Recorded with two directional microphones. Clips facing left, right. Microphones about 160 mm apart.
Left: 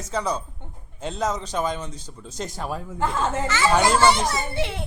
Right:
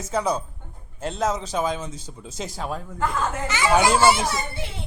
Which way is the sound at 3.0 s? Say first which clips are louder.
Left 1 dB; 25° left (ahead or behind).